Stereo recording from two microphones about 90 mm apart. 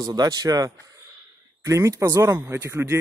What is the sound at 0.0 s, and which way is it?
Speech, 45° right (ahead or behind).